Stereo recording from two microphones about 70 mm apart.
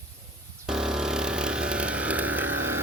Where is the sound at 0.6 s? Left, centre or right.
Centre.